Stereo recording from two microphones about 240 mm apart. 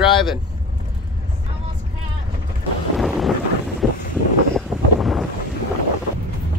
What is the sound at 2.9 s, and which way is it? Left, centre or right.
Thunder, centre.